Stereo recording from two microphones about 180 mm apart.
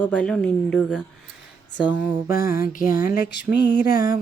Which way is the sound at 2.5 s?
50° left (ahead or behind).